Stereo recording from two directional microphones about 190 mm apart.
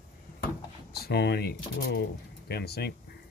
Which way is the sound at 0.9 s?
55° left (ahead or behind).